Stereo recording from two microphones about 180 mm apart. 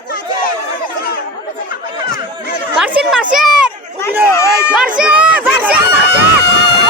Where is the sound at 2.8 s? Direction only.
5° right (ahead or behind).